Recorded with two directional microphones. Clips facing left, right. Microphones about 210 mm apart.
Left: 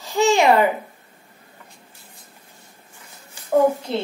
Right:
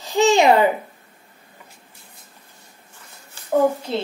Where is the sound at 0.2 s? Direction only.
20° right (ahead or behind).